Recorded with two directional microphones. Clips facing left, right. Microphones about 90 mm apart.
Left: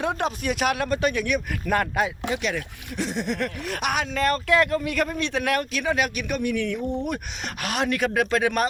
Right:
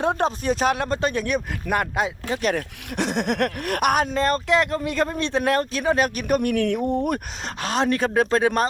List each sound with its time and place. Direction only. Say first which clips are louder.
0.0 s speech: right 3 dB; 35° right (ahead or behind)
1.6 s speech: left 1 dB; 20° right (ahead or behind)
2.4 s speech: right 4 dB; 50° right (ahead or behind)
3.0 s speech: right 4 dB; 70° right (ahead or behind); by 4.1 s 50° right (ahead or behind)
4.1 s speech: right 1 dB; 25° right (ahead or behind); by 7.2 s 55° right (ahead or behind)
7.4 s speech: right 3 dB; 30° right (ahead or behind)